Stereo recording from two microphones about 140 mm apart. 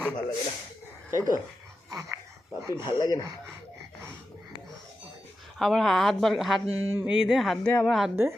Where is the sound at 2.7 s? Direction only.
30° left (ahead or behind).